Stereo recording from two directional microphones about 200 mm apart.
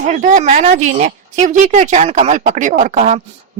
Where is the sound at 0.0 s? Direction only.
40° right (ahead or behind).